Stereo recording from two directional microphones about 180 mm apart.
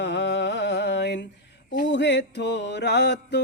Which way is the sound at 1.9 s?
75° left (ahead or behind).